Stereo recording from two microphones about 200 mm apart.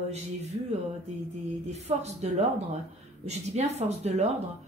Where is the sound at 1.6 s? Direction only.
35° right (ahead or behind).